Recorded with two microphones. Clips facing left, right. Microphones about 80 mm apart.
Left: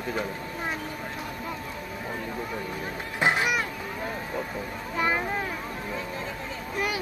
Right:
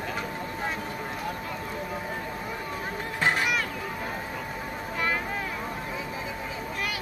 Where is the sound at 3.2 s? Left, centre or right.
Centre.